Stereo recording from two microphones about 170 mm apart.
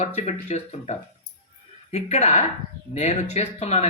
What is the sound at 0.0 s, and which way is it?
Speech, 40° left (ahead or behind).